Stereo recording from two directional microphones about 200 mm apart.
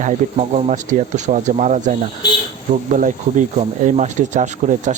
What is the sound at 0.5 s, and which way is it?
Speech, 35° right (ahead or behind).